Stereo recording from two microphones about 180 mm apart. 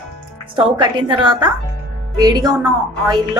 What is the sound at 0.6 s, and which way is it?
A woman's voice, 25° right (ahead or behind).